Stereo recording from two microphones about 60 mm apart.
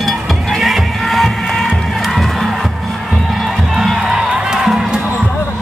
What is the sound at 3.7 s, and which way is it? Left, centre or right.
Music, centre.